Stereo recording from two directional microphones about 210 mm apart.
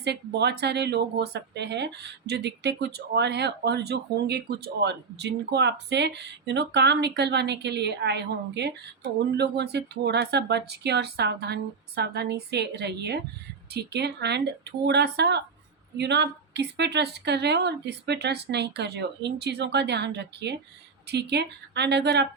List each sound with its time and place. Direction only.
0.0 s speech: 55° right (ahead or behind)